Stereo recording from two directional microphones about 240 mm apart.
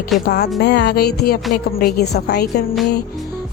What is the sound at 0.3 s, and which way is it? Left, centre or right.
Speech, left.